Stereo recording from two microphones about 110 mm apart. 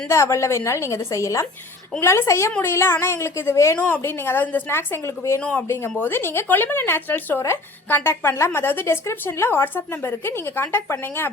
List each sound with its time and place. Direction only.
0.1 s speech: 25° left (ahead or behind)
5.4 s speech: 10° left (ahead or behind)
5.6 s speech: 25° left (ahead or behind)